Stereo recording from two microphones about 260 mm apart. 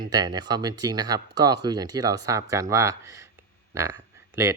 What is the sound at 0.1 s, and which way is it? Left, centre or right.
Speech, centre.